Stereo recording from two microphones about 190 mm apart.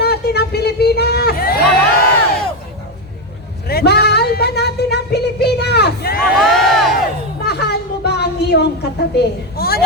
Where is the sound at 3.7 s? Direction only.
55° left (ahead or behind).